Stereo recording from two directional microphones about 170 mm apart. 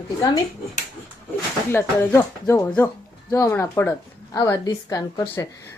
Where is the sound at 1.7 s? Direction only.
15° left (ahead or behind).